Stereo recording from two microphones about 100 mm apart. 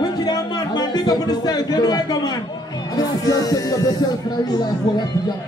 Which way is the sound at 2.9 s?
40° left (ahead or behind).